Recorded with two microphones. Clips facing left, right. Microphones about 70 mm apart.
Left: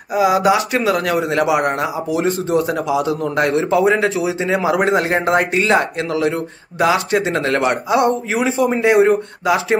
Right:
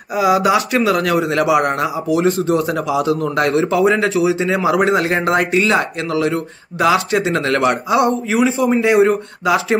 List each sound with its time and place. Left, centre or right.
0.1 s a man's voice: left